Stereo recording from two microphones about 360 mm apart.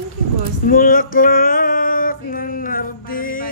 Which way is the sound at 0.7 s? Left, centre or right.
Left.